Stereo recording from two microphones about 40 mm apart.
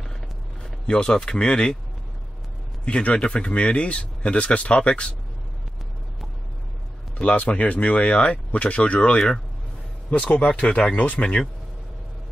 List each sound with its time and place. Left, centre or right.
0.7 s speech: left
2.8 s speech: left
7.2 s speech: left
10.4 s speech: left
11.0 s speech: left